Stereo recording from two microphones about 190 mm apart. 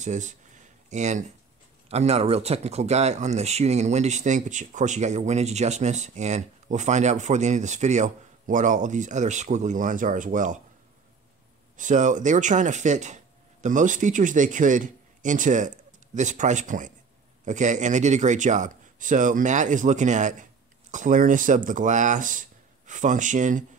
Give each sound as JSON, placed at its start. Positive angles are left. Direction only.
{"t": 0.0, "sound": "speech", "side_deg": -40}
{"t": 11.7, "sound": "speech", "side_deg": -40}